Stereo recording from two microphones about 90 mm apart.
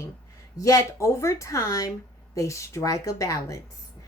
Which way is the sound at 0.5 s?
40° left (ahead or behind).